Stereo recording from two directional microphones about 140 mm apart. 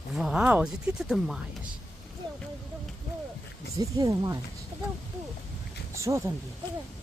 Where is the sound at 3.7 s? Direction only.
25° right (ahead or behind).